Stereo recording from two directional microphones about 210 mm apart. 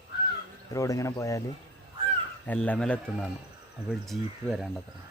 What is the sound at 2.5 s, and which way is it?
A man's voice, 5° left (ahead or behind).